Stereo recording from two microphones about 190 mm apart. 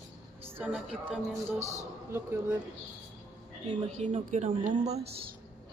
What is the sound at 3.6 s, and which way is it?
Speech, 35° right (ahead or behind).